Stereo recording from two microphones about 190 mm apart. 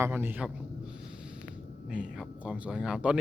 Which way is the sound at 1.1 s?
5° right (ahead or behind).